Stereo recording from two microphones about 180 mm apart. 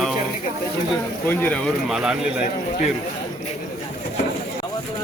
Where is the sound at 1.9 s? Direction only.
5° right (ahead or behind).